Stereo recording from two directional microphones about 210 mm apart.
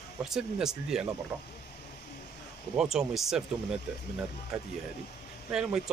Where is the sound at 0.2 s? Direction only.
Centre (ahead or behind).